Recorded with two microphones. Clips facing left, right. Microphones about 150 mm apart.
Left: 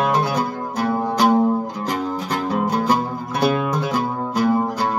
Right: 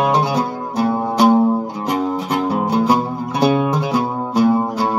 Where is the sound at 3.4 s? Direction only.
5° right (ahead or behind).